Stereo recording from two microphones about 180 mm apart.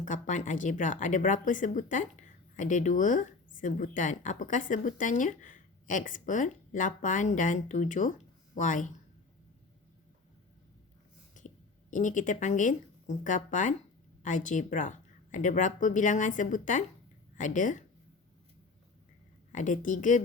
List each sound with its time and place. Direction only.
0.0 s speech: 45° left (ahead or behind)
11.3 s speech: 45° left (ahead or behind)
19.5 s speech: 45° left (ahead or behind)